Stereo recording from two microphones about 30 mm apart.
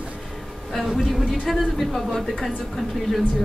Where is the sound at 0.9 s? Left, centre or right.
Centre.